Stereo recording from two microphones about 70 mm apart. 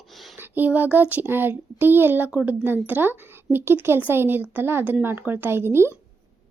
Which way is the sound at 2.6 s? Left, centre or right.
Right.